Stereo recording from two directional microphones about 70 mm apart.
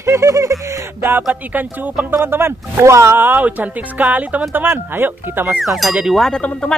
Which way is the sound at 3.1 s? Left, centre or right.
Right.